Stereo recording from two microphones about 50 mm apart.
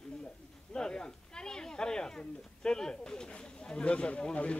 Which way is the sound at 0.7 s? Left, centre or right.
Centre.